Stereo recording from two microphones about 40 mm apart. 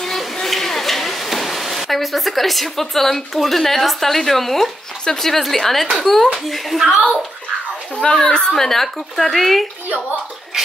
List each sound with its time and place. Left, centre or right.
0.0 s a sound: centre
5.0 s a woman's voice: centre
7.9 s speech: left
8.5 s speech: centre